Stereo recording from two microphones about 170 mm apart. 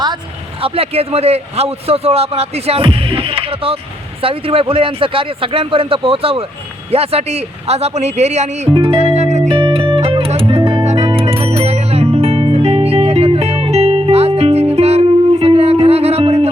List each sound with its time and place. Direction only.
0.6 s a man's voice: 35° right (ahead or behind)
8.7 s music: 30° right (ahead or behind)
9.6 s music: 30° right (ahead or behind)
11.2 s music: 35° right (ahead or behind)